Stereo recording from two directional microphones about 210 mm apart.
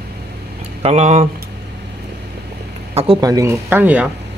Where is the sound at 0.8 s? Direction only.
30° right (ahead or behind).